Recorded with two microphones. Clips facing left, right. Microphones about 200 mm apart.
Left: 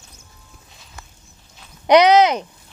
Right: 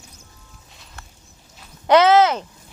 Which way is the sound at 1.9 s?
15° left (ahead or behind).